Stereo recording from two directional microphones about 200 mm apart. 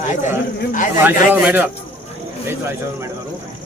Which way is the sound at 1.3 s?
10° right (ahead or behind).